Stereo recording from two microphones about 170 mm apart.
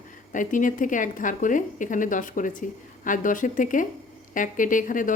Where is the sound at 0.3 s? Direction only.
50° left (ahead or behind).